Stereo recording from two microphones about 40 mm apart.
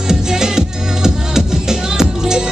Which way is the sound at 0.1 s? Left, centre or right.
Centre.